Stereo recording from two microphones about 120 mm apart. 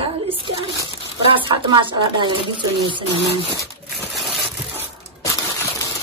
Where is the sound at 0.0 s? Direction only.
55° right (ahead or behind).